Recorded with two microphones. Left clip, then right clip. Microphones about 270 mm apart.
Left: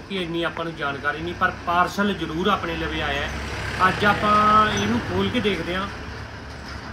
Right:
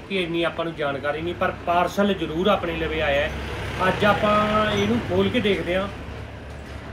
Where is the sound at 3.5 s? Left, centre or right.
Left.